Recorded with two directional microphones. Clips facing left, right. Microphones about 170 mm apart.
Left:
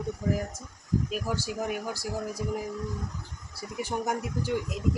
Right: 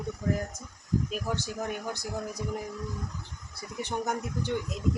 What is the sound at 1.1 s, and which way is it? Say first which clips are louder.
Speech: left 1 dB; 10° left (ahead or behind).